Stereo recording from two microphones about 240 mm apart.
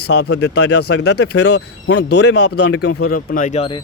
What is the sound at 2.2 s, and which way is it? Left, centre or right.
Speech, left.